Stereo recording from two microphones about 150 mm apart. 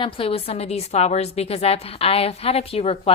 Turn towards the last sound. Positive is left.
turn(degrees=40)  # may be behind; listen again after turning